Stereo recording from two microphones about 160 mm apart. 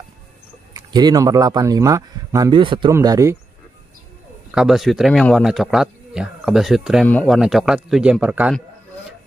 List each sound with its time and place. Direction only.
0.7 s speech: 25° right (ahead or behind)
4.5 s speech: 5° right (ahead or behind)